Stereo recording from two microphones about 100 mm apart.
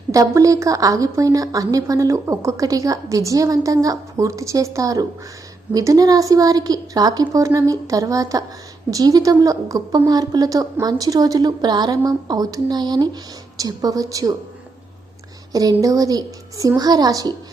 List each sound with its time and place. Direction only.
0.1 s a woman's voice: 35° right (ahead or behind)
15.8 s a woman's voice: 35° right (ahead or behind)